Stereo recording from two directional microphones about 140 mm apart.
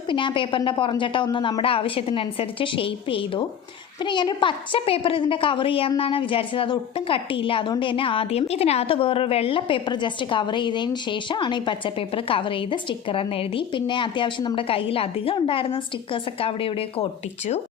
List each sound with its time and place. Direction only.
0.1 s a woman's voice: 35° left (ahead or behind)